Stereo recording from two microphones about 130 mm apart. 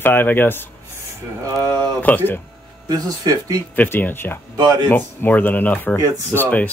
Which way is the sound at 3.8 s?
15° left (ahead or behind).